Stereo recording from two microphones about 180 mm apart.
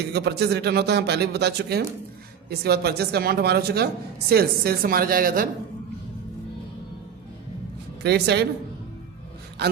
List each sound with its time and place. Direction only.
0.1 s a man's voice: 65° right (ahead or behind)
8.0 s a man's voice: 65° right (ahead or behind)
9.6 s speech: 65° right (ahead or behind)